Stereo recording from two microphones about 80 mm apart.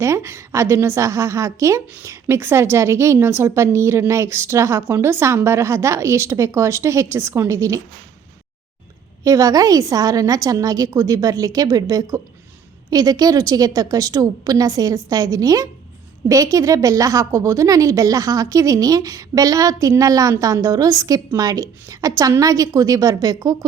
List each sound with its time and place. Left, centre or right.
0.0 s a woman's voice: right
9.2 s a woman's voice: right